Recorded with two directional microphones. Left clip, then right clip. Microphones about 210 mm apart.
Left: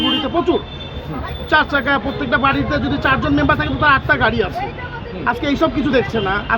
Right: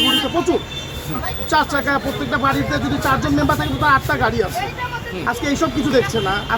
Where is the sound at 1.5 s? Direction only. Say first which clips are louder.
Left 3 dB; 15° left (ahead or behind).